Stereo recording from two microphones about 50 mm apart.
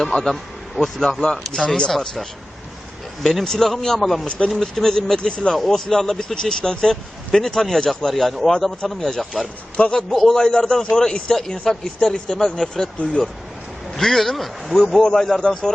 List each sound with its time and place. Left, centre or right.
0.0 s speech: centre
1.5 s speech: centre
3.2 s speech: centre
4.3 s speech: left
4.5 s speech: centre
9.7 s speech: left
10.1 s speech: centre
13.9 s speech: centre
15.0 s speech: centre